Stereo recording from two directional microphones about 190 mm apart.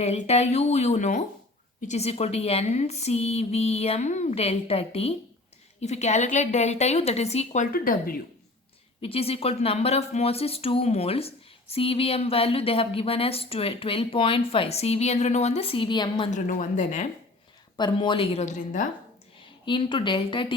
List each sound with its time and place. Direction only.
0.0 s speech: 35° left (ahead or behind)
9.0 s speech: 30° left (ahead or behind)
16.5 s speech: 40° left (ahead or behind)
17.7 s a woman's voice: 25° left (ahead or behind)
18.4 s a woman's voice: 40° left (ahead or behind)
19.6 s a woman's voice: 25° left (ahead or behind)